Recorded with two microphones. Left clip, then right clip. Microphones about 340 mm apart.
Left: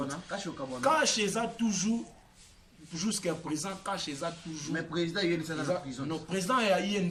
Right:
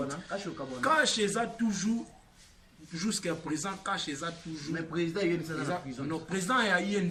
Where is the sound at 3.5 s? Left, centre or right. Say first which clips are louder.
Right 1 dB; centre.